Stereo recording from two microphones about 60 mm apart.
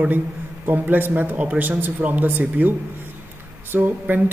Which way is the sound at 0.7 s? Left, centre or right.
Right.